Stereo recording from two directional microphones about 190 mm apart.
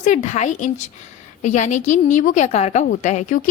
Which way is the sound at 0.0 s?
40° left (ahead or behind).